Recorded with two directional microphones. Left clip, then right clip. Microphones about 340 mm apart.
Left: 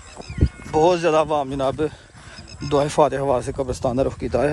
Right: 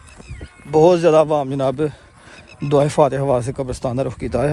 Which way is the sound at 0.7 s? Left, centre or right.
Centre.